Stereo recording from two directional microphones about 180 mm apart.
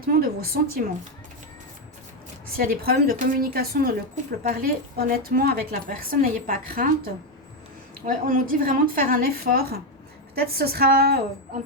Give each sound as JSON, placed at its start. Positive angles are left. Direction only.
{"t": 0.0, "sound": "speech", "side_deg": -55}
{"t": 2.6, "sound": "a woman's voice", "side_deg": -55}